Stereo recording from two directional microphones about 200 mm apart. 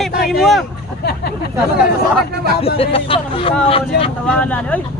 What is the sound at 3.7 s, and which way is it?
Speech, 30° left (ahead or behind).